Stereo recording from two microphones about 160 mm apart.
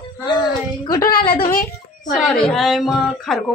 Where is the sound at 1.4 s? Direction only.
60° left (ahead or behind).